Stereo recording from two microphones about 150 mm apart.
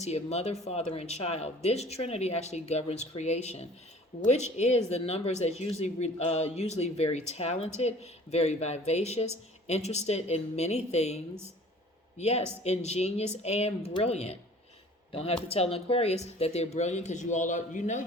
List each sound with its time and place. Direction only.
0.0 s speech: 45° left (ahead or behind)